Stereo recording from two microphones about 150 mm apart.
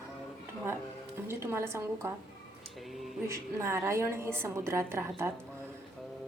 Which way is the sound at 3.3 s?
15° right (ahead or behind).